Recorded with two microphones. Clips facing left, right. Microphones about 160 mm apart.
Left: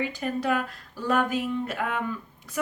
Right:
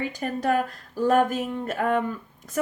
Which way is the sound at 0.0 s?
45° right (ahead or behind).